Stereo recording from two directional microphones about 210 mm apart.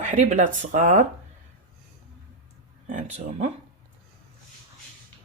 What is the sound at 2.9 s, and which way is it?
Speech, 35° right (ahead or behind).